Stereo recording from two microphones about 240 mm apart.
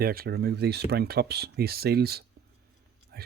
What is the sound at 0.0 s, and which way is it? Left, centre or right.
Speech, right.